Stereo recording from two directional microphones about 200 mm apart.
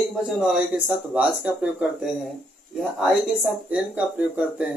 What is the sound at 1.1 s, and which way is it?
Speech, 5° right (ahead or behind).